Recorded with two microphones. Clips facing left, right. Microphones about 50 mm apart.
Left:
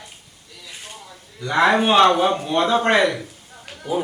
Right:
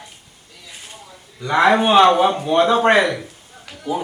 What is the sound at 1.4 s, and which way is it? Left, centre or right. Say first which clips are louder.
Speech: right 2 dB; centre.